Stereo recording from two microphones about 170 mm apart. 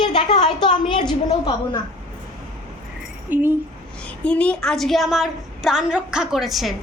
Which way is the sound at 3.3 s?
10° right (ahead or behind).